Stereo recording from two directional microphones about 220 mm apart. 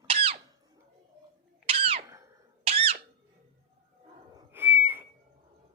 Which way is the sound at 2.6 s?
25° right (ahead or behind).